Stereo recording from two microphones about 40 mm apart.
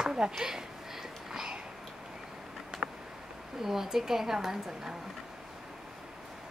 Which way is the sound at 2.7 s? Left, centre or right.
Centre.